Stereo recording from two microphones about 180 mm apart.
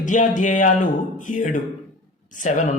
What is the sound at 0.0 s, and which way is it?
Speech, 45° left (ahead or behind).